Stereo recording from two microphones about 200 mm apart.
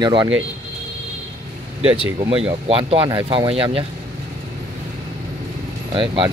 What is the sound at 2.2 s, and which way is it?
Speech, 25° right (ahead or behind).